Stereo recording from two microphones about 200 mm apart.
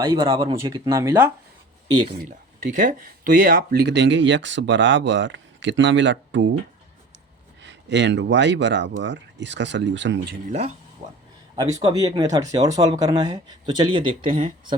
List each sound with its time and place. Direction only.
0.1 s speech: 20° right (ahead or behind)
2.7 s speech: 40° right (ahead or behind); by 6.5 s 65° right (ahead or behind)
7.6 s speech: 60° right (ahead or behind)
10.4 s a man's voice: 35° right (ahead or behind)